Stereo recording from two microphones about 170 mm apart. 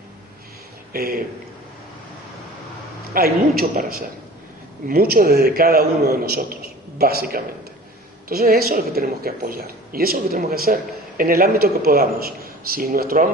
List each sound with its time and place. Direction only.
0.9 s a woman's voice: 60° right (ahead or behind)
3.1 s a woman's voice: 65° right (ahead or behind)